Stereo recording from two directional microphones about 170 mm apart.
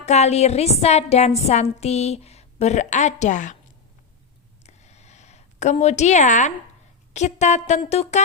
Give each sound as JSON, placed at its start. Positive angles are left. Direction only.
{"t": 0.0, "sound": "a woman's voice", "side_deg": 40}
{"t": 4.6, "sound": "a sound", "side_deg": 40}
{"t": 5.8, "sound": "a woman's voice", "side_deg": 40}